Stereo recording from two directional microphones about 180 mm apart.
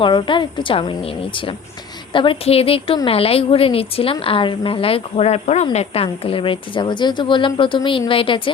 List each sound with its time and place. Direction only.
0.0 s a woman's voice: 25° left (ahead or behind)